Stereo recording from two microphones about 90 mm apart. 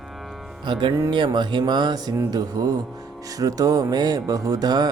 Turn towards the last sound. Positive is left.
turn(degrees=-50)  # may be behind; listen again after turning